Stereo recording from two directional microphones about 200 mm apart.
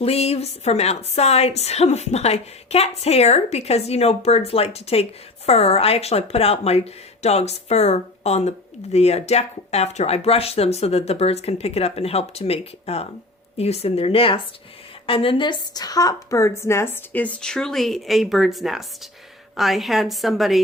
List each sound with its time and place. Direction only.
0.0 s a woman's voice: 30° left (ahead or behind); by 20.6 s centre (ahead or behind)